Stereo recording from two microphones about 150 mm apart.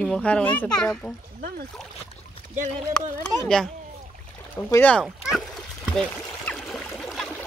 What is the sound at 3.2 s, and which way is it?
Speech, 5° left (ahead or behind).